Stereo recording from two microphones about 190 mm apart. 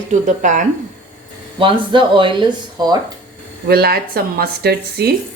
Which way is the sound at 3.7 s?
55° right (ahead or behind).